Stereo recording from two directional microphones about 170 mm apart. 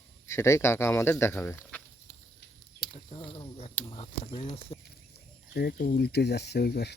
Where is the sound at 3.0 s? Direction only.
30° left (ahead or behind).